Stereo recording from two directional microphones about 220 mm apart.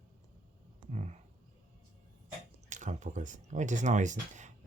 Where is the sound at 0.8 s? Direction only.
30° right (ahead or behind).